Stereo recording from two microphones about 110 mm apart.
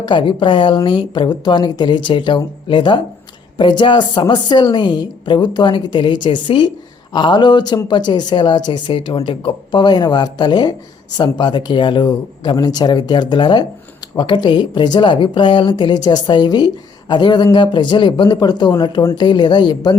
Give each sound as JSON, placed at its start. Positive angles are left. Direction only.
{"t": 0.0, "sound": "a woman's voice", "side_deg": 45}